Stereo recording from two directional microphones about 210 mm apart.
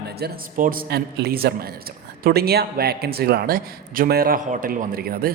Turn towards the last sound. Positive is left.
turn(degrees=-45)  # may be behind; listen again after turning